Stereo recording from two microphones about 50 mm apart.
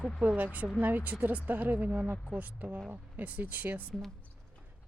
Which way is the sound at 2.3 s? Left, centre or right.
Right.